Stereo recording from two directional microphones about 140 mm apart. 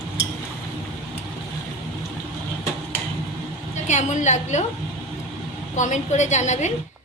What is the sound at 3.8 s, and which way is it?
Speech, 60° left (ahead or behind).